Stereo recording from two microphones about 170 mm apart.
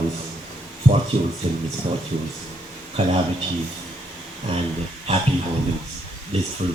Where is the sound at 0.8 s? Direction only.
35° right (ahead or behind).